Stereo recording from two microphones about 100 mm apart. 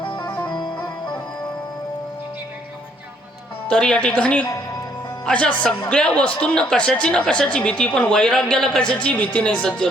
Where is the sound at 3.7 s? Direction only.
10° left (ahead or behind).